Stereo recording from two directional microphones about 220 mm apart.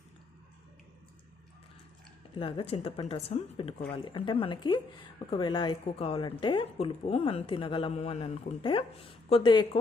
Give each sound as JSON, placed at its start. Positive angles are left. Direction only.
{"t": 2.3, "sound": "speech", "side_deg": 25}